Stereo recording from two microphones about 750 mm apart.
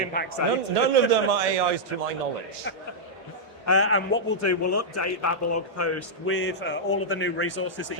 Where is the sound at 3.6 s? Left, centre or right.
Centre.